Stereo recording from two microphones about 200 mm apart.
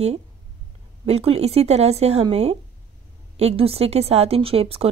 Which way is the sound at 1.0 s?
30° right (ahead or behind).